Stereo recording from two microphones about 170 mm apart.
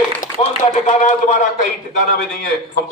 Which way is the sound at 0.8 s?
50° left (ahead or behind).